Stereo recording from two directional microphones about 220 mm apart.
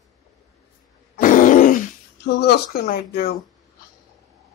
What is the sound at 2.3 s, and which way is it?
Speech, 50° left (ahead or behind).